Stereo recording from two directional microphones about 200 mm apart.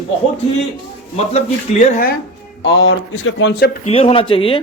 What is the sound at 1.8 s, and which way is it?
Speech, 45° left (ahead or behind).